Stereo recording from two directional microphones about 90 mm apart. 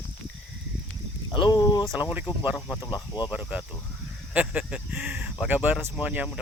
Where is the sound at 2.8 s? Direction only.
50° left (ahead or behind).